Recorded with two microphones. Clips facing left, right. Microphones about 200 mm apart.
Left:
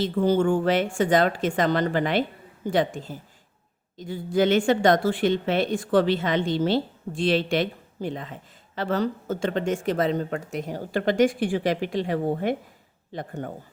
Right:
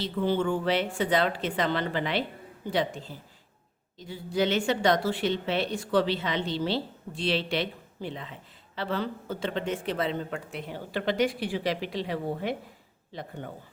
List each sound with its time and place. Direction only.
0.0 s speech: 45° left (ahead or behind)